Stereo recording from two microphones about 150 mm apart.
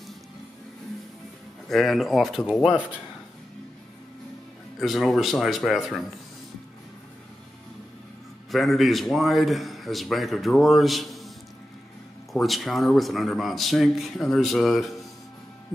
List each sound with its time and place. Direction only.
1.7 s a man's voice: centre (ahead or behind)
4.7 s a man's voice: centre (ahead or behind)
8.5 s a man's voice: centre (ahead or behind)